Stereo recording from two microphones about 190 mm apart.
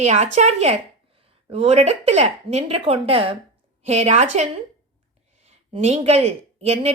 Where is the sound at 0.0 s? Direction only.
35° right (ahead or behind).